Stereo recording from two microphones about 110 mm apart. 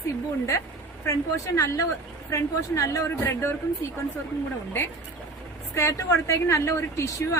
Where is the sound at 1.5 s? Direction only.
30° left (ahead or behind).